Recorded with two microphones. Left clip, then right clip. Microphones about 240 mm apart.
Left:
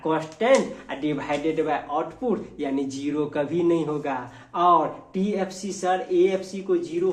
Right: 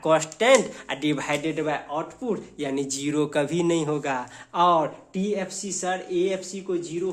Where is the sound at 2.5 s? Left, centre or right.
Right.